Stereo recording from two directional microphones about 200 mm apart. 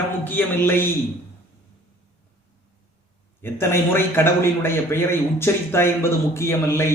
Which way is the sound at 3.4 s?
10° left (ahead or behind).